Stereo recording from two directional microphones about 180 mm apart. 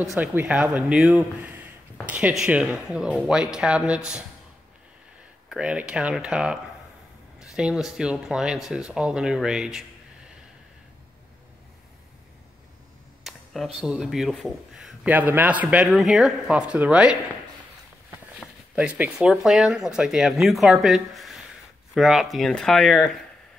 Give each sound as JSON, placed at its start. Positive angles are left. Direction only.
{"t": 0.1, "sound": "speech", "side_deg": -10}
{"t": 5.5, "sound": "speech", "side_deg": -5}
{"t": 13.2, "sound": "a sound", "side_deg": 0}
{"t": 13.7, "sound": "speech", "side_deg": 0}
{"t": 18.4, "sound": "speech", "side_deg": -5}